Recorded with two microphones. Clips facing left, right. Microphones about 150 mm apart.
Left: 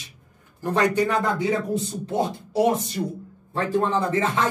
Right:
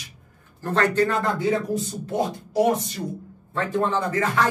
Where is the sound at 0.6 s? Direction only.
15° left (ahead or behind).